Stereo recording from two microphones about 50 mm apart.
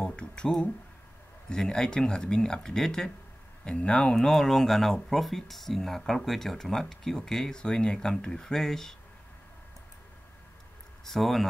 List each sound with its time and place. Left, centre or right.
0.0 s a sound: left
1.5 s speech: centre
11.1 s speech: centre